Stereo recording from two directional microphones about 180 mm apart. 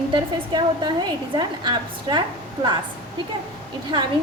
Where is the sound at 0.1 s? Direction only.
25° right (ahead or behind).